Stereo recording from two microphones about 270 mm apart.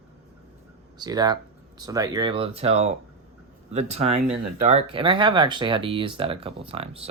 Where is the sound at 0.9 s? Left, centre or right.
Centre.